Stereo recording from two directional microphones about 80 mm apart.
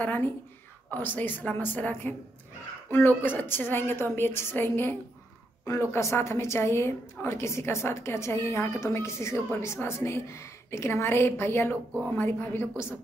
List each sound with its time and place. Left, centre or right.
0.0 s a woman's voice: left
5.7 s a woman's voice: left